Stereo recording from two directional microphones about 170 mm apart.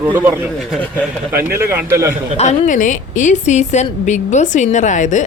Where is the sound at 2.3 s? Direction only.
40° left (ahead or behind).